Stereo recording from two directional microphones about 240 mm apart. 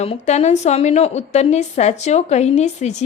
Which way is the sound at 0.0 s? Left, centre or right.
Left.